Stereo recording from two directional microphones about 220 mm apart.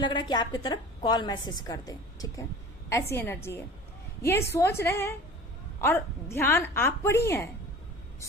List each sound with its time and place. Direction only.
0.0 s a woman's voice: 20° left (ahead or behind)